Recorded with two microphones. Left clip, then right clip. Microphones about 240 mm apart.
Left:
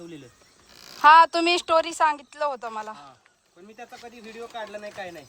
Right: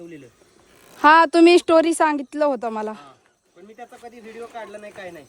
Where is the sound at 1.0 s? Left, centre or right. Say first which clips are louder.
Right 2 dB; right.